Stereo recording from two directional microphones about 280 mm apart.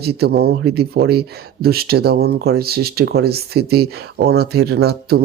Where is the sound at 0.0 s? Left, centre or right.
Right.